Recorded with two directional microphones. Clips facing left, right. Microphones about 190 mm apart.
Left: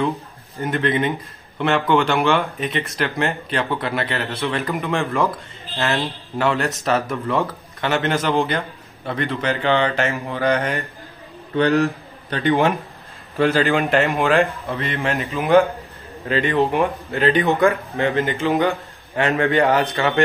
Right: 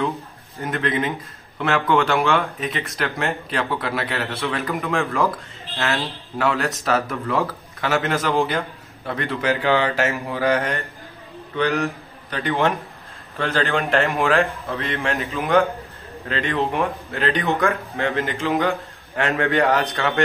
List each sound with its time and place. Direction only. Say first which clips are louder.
0.6 s speech: left 3 dB; centre (ahead or behind)
6.3 s speech: left 1 dB; centre (ahead or behind)
11.5 s a man's voice: left 5 dB; 35° left (ahead or behind)
12.4 s speech: left 4 dB; 15° left (ahead or behind)